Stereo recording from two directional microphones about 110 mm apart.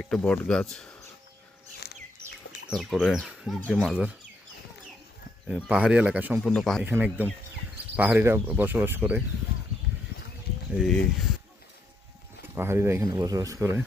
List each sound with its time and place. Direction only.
0.0 s speech: 5° left (ahead or behind)
2.6 s speech: centre (ahead or behind)
5.5 s speech: 10° right (ahead or behind)
6.4 s speech: 5° left (ahead or behind)
6.8 s speech: 15° right (ahead or behind)
10.7 s speech: centre (ahead or behind)
12.5 s speech: 25° right (ahead or behind)